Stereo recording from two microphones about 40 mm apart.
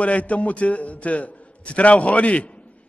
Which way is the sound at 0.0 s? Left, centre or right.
Left.